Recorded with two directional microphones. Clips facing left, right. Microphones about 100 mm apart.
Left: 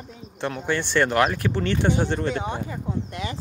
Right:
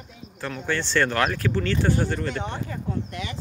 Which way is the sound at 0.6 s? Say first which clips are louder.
Left 1 dB; 15° left (ahead or behind).